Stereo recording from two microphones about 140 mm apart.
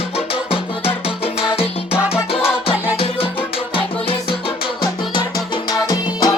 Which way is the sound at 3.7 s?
40° left (ahead or behind).